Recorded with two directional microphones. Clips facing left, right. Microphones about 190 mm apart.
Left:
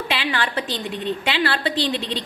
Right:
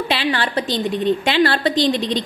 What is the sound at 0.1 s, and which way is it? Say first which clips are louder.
A woman's voice: right 3 dB; 35° right (ahead or behind).